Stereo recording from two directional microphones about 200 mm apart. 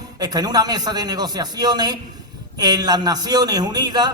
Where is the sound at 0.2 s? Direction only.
20° right (ahead or behind).